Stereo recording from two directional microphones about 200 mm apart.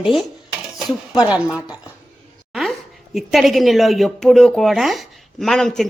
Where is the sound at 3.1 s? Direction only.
Centre (ahead or behind).